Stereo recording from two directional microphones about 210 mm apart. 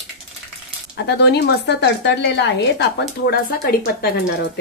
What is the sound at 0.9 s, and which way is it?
Speech, 55° left (ahead or behind).